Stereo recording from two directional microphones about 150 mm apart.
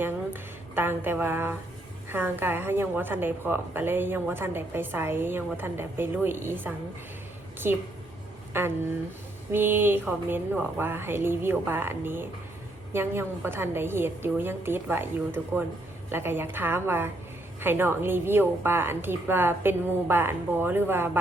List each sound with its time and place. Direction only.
0.7 s a woman's voice: 15° right (ahead or behind)